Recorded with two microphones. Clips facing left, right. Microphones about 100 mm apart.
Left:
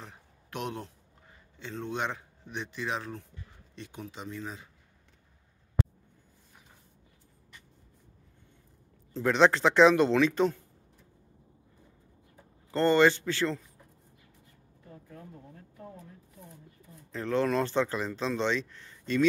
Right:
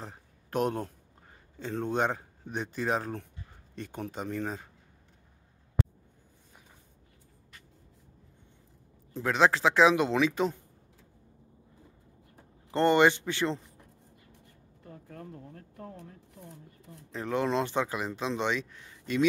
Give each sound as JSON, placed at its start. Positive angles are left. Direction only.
{"t": 0.0, "sound": "a sound", "side_deg": -40}
{"t": 1.6, "sound": "speech", "side_deg": -45}
{"t": 9.2, "sound": "speech", "side_deg": -5}
{"t": 12.7, "sound": "speech", "side_deg": -20}
{"t": 15.0, "sound": "a sound", "side_deg": -65}
{"t": 17.1, "sound": "speech", "side_deg": -15}